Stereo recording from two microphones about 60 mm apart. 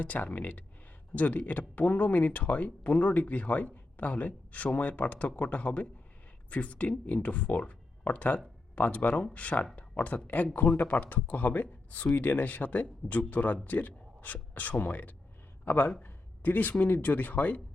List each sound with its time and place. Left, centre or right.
0.0 s a man's voice: left